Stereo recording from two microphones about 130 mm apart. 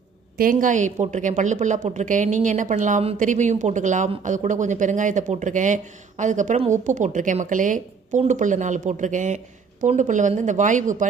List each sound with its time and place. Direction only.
0.4 s a woman's voice: 80° right
8.2 s a woman's voice: 70° right (ahead or behind)